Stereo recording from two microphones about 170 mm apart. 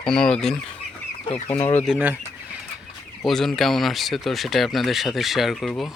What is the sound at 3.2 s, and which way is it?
Speech, centre (ahead or behind).